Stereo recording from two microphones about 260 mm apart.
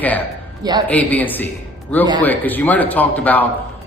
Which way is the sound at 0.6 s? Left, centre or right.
Centre.